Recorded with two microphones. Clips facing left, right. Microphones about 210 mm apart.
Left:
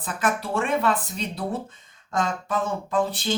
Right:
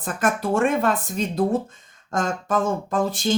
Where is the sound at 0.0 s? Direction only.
45° right (ahead or behind).